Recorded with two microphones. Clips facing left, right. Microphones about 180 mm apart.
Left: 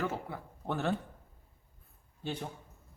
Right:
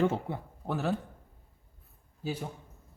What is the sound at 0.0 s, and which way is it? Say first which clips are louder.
Speech: right 7 dB; 25° right (ahead or behind).